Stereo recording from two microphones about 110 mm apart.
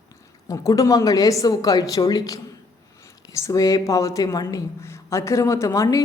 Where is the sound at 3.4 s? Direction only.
30° left (ahead or behind).